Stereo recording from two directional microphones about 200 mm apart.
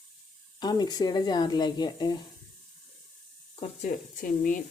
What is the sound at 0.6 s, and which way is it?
Speech, 20° left (ahead or behind).